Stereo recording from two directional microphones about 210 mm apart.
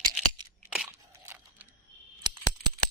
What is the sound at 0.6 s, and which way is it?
Crunch, 5° right (ahead or behind).